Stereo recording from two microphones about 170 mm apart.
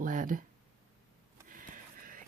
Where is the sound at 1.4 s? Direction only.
55° right (ahead or behind).